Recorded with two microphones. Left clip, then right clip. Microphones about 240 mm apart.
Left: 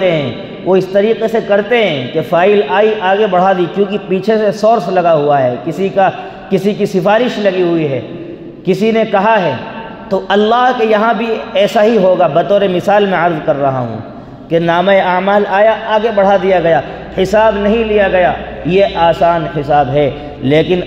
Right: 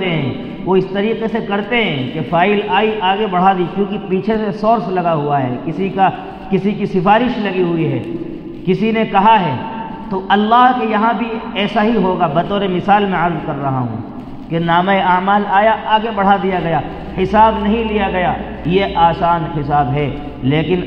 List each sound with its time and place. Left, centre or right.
0.7 s a man's voice: left
8.6 s a man's voice: left